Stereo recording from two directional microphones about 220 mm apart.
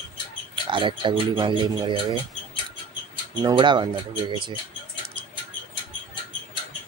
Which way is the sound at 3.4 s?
20° right (ahead or behind).